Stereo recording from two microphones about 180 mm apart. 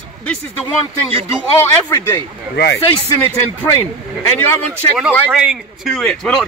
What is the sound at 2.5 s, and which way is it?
Speech, 65° left (ahead or behind).